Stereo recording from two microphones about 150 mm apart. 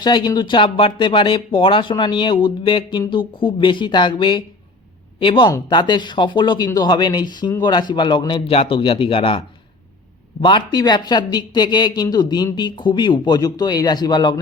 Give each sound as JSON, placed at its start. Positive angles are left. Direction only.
{"t": 0.0, "sound": "speech", "side_deg": 30}
{"t": 10.4, "sound": "speech", "side_deg": 30}